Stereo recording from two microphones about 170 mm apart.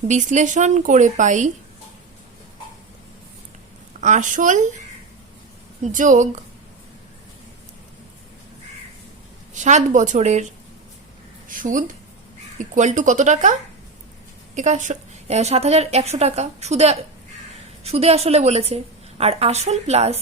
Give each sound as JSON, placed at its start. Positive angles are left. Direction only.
{"t": 0.1, "sound": "speech", "side_deg": -45}
{"t": 4.0, "sound": "speech", "side_deg": -45}
{"t": 5.8, "sound": "speech", "side_deg": -50}
{"t": 9.6, "sound": "a woman's voice", "side_deg": -45}